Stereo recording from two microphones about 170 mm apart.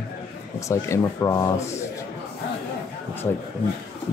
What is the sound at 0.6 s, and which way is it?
Speech, 20° left (ahead or behind).